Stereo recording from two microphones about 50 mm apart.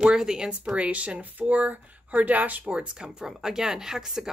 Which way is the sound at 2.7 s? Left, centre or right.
Centre.